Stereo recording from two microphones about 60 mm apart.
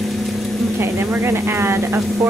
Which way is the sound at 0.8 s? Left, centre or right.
Right.